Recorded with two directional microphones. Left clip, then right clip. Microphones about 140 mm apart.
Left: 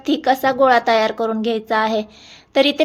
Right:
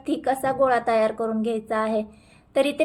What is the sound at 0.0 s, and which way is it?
Speech, 25° left (ahead or behind).